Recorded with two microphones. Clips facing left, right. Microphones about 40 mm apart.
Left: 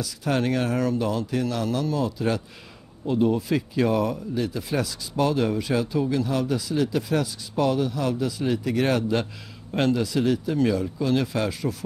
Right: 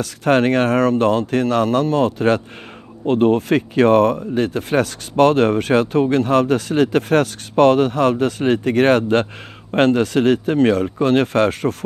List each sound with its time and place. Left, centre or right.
0.0 s speech: right